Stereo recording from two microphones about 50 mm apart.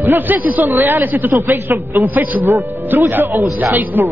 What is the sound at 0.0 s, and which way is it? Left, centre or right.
A man's voice, right.